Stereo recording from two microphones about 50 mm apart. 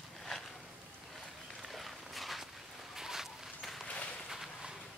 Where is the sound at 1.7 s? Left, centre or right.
Centre.